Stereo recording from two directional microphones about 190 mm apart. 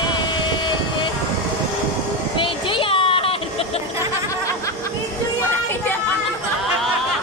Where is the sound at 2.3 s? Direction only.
25° left (ahead or behind).